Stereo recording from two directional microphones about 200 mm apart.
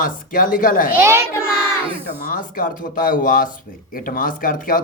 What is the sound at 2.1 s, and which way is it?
Speech, 45° left (ahead or behind).